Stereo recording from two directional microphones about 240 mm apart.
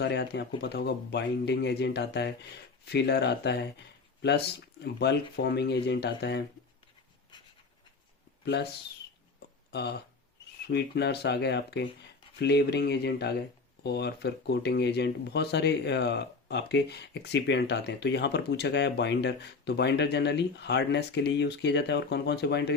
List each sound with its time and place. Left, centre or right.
0.0 s speech: left
10.7 s speech: left